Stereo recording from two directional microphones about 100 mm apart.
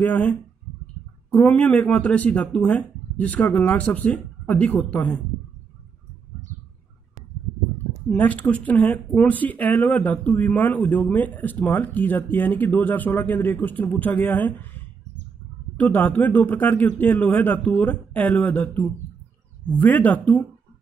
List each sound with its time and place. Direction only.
0.0 s speech: 15° left (ahead or behind)
8.2 s speech: 15° left (ahead or behind)
19.7 s speech: 15° left (ahead or behind)